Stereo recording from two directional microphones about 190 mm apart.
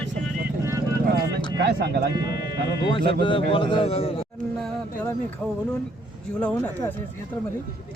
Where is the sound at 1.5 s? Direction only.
60° right (ahead or behind).